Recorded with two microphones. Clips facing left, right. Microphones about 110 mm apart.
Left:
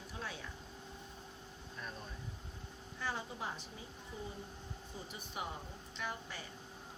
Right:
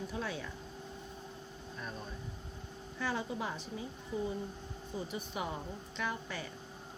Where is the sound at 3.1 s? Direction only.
90° right.